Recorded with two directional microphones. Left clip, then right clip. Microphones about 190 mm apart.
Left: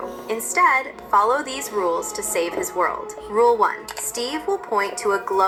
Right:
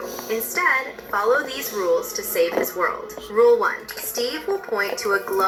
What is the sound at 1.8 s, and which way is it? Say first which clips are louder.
Speech: left 1 dB; 35° left (ahead or behind).